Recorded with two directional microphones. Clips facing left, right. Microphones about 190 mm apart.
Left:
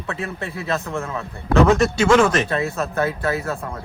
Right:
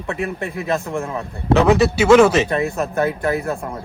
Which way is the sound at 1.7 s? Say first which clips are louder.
Right 4 dB; 5° right (ahead or behind).